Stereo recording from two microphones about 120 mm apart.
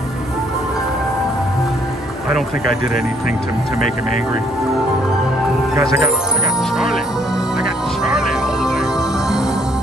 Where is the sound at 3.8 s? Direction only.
90° left.